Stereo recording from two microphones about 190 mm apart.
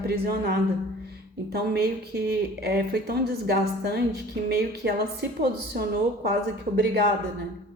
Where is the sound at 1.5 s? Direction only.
55° right (ahead or behind).